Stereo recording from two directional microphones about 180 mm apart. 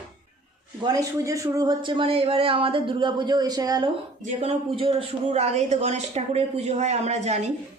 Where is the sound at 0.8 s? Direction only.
20° right (ahead or behind).